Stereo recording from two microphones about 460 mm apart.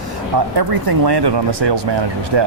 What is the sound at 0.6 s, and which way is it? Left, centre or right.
Speech, right.